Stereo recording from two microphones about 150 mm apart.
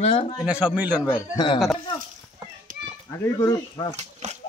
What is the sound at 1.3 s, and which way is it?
Speech, 30° left (ahead or behind).